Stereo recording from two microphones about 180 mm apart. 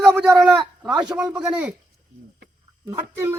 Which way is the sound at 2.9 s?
15° right (ahead or behind).